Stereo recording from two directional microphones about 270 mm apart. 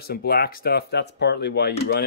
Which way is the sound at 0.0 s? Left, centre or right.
Left.